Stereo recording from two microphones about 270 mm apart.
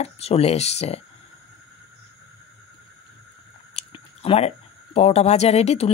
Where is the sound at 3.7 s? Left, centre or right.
Centre.